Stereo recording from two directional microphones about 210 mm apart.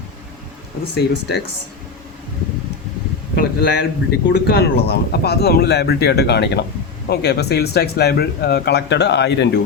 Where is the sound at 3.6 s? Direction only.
55° left (ahead or behind).